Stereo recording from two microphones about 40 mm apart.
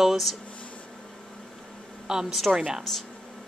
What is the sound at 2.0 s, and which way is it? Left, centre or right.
Speech, centre.